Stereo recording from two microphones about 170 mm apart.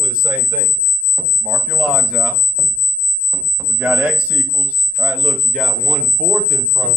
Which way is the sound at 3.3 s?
Centre (ahead or behind).